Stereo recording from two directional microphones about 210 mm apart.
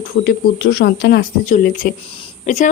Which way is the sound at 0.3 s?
50° left (ahead or behind).